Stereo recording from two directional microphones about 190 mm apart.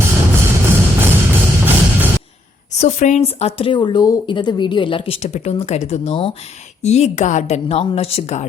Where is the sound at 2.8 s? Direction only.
40° left (ahead or behind).